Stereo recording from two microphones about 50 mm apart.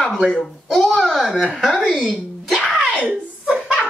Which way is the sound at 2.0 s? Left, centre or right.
Centre.